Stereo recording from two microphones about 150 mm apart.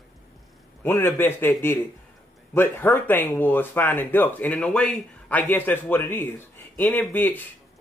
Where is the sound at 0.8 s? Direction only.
15° left (ahead or behind).